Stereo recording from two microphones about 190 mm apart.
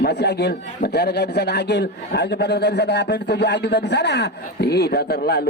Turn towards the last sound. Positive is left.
turn(degrees=55)  # may be behind; listen again after turning